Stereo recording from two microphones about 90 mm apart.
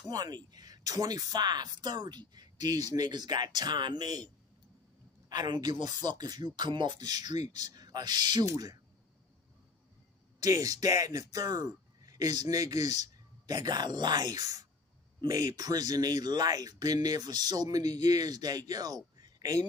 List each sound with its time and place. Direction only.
0.1 s speech: 45° right (ahead or behind)
5.3 s speech: 60° right (ahead or behind); by 8.7 s 45° right (ahead or behind)
10.4 s speech: 40° right (ahead or behind)